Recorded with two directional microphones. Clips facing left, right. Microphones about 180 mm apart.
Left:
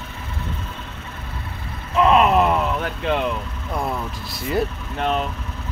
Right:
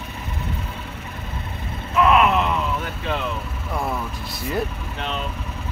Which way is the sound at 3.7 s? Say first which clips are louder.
Left 1 dB; 5° left (ahead or behind).